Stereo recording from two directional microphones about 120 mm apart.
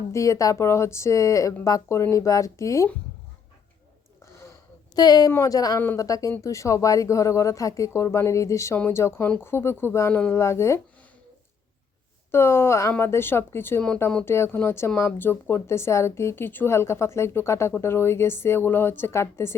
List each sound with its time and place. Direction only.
0.1 s speech: 25° left (ahead or behind)
4.9 s speech: 35° left (ahead or behind)
12.3 s speech: 20° left (ahead or behind)